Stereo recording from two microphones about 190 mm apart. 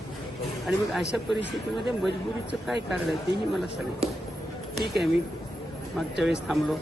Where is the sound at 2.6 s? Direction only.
Centre (ahead or behind).